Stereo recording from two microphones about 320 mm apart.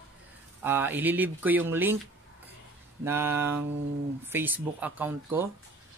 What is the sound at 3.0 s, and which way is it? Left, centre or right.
Speech, centre.